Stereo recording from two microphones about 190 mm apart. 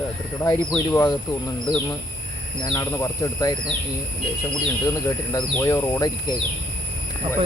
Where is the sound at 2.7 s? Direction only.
15° left (ahead or behind).